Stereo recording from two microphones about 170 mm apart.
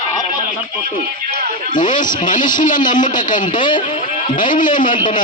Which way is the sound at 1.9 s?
50° left (ahead or behind).